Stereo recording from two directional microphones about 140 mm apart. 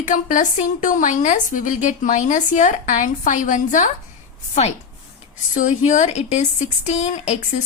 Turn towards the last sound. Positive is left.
turn(degrees=55)  # may be behind; listen again after turning